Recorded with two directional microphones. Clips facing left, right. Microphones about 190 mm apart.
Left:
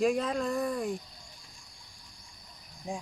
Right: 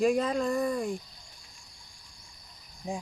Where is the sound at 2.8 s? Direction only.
15° right (ahead or behind).